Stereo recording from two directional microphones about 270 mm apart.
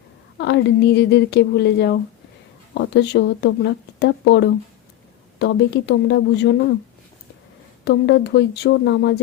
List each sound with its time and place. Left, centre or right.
0.3 s speech: left
7.9 s speech: left